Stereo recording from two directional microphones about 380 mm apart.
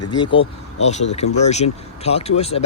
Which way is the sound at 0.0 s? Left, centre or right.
Centre.